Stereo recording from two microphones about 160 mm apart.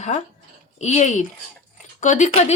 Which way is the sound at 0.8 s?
45° left (ahead or behind).